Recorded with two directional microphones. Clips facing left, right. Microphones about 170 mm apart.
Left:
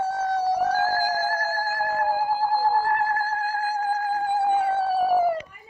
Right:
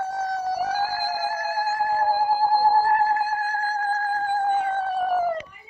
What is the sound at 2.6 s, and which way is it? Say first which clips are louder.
Theremin: right 3 dB; 40° right (ahead or behind).